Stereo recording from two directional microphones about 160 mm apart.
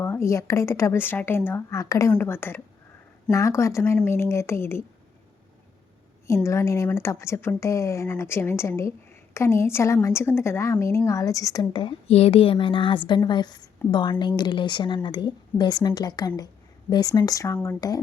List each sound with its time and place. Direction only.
0.0 s a woman's voice: 15° left (ahead or behind)
6.2 s a woman's voice: 20° left (ahead or behind)
12.0 s a woman's voice: 40° left (ahead or behind); by 18.0 s 25° left (ahead or behind)